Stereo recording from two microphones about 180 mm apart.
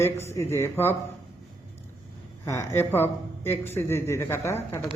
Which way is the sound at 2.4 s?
15° left (ahead or behind).